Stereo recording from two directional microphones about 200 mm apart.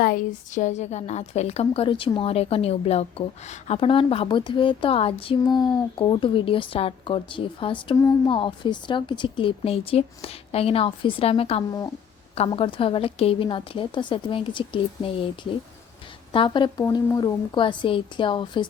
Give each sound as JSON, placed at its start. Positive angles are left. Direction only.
{"t": 0.0, "sound": "a woman's voice", "side_deg": 45}
{"t": 16.3, "sound": "a woman's voice", "side_deg": 25}